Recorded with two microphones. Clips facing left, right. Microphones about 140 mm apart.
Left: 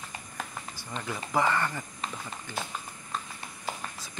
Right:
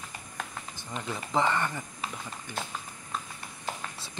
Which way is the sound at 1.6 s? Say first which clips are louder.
Even; 5° right (ahead or behind).